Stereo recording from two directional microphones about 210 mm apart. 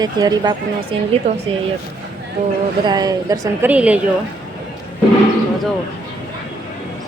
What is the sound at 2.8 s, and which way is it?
A woman's voice, 20° right (ahead or behind).